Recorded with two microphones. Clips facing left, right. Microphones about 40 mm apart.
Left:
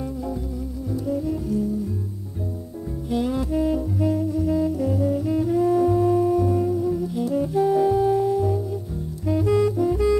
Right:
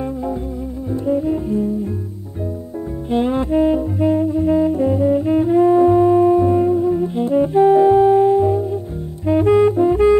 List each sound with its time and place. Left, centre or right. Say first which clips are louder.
0.9 s music: right 7 dB; right
3.1 s saxophone: right 6 dB; right